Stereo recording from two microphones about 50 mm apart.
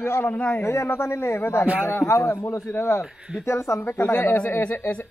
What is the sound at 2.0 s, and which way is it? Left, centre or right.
Speech, left.